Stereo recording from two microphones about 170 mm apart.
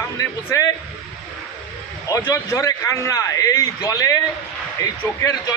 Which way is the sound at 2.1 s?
15° left (ahead or behind).